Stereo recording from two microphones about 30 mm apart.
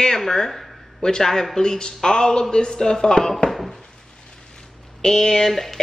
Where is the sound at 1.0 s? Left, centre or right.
Centre.